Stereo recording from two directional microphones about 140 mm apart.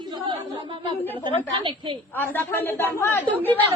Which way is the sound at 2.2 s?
15° left (ahead or behind).